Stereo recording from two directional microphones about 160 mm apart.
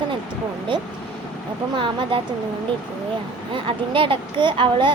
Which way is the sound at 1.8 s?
30° right (ahead or behind).